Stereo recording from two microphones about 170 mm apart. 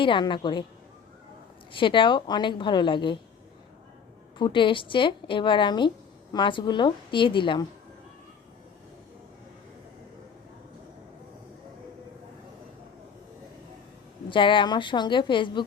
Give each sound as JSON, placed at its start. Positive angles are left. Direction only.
{"t": 0.0, "sound": "a woman's voice", "side_deg": 30}
{"t": 1.7, "sound": "a woman's voice", "side_deg": 30}
{"t": 4.4, "sound": "a woman's voice", "side_deg": 30}
{"t": 14.3, "sound": "a woman's voice", "side_deg": 30}